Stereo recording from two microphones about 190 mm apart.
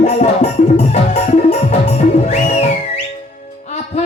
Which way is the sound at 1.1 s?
35° left (ahead or behind).